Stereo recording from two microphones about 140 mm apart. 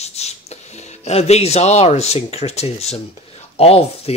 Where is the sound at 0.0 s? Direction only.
50° left (ahead or behind).